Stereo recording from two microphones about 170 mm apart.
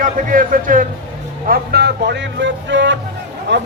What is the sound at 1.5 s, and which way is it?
Speech, 70° right (ahead or behind).